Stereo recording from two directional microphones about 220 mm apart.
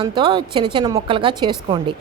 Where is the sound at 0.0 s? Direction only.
20° right (ahead or behind).